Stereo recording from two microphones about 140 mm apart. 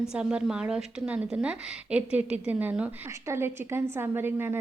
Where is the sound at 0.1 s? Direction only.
5° right (ahead or behind).